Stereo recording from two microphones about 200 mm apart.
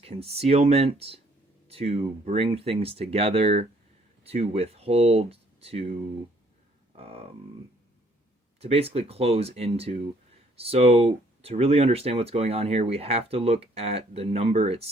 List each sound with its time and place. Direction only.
0.0 s speech: 30° right (ahead or behind)
6.9 s a sound: 30° right (ahead or behind)
8.6 s speech: 30° right (ahead or behind)